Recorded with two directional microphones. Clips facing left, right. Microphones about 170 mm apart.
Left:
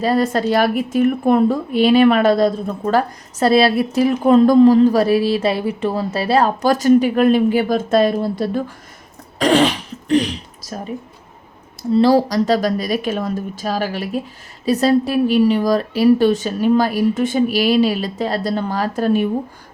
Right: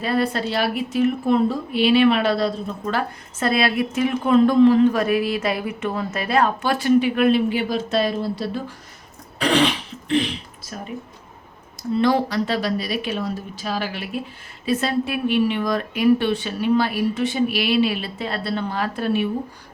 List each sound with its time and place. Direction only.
0.0 s a woman's voice: 40° left (ahead or behind)